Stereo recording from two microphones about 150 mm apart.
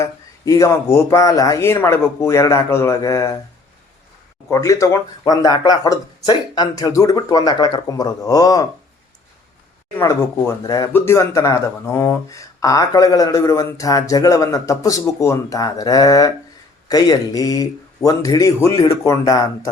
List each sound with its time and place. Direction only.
0.0 s speech: 20° left (ahead or behind)
4.4 s speech: 20° left (ahead or behind)
10.0 s speech: 20° left (ahead or behind)